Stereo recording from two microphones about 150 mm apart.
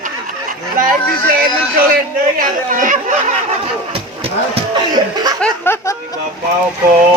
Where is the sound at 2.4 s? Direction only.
60° right (ahead or behind).